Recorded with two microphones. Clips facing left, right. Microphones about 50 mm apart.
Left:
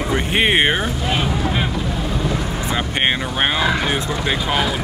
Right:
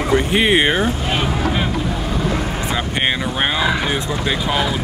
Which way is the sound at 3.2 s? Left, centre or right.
Centre.